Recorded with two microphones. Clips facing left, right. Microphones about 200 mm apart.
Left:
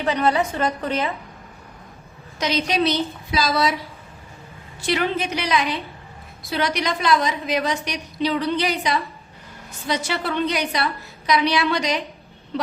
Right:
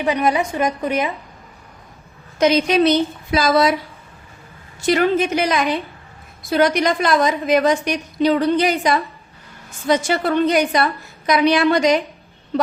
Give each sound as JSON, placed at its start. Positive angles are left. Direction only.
{"t": 0.0, "sound": "a woman's voice", "side_deg": -10}
{"t": 2.4, "sound": "a woman's voice", "side_deg": -50}
{"t": 4.9, "sound": "a woman's voice", "side_deg": -45}